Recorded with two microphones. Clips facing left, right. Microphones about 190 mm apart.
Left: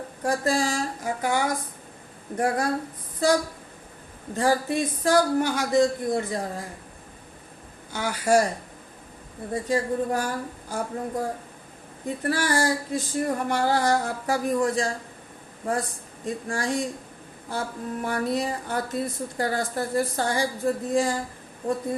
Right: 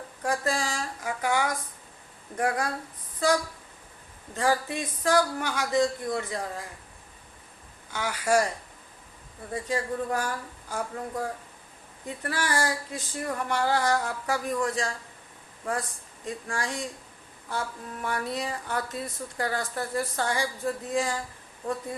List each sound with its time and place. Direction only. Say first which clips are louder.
0.2 s speech: left 4 dB; 35° left (ahead or behind)
4.4 s speech: left 4 dB; 35° left (ahead or behind)
7.9 s speech: left 3 dB; 35° left (ahead or behind)
16.2 s speech: left 5 dB; 35° left (ahead or behind)